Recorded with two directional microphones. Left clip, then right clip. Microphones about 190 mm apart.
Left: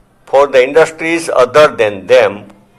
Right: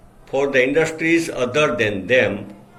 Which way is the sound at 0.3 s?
50° left (ahead or behind).